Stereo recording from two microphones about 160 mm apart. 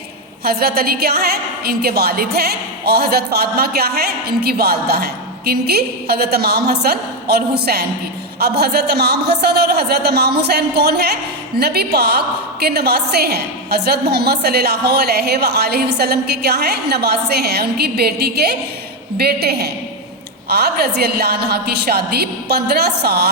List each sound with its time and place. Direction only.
0.4 s a woman's voice: 70° right (ahead or behind)